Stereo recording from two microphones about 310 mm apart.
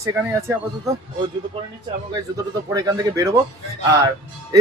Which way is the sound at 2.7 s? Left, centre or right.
Centre.